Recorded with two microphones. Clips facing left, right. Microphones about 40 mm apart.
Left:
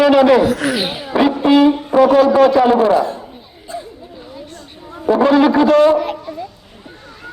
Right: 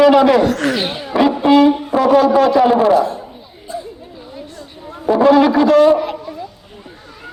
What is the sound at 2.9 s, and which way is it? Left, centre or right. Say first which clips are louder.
Speech: right 1 dB; left.